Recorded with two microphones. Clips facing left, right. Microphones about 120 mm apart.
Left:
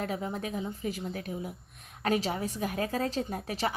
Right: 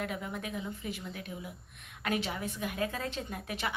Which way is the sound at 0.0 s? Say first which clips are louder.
Left 4 dB; 35° left (ahead or behind).